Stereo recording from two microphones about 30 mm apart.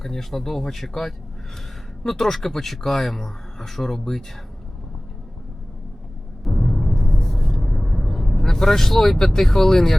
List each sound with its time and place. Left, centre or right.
0.0 s speech: centre
6.4 s timpani: centre
6.9 s vehicle: centre
8.4 s speech: centre